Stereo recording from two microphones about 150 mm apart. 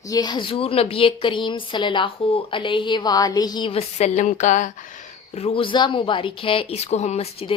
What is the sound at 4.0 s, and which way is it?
Speech, 55° left (ahead or behind).